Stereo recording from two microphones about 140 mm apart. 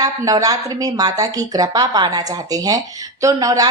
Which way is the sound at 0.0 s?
25° right (ahead or behind).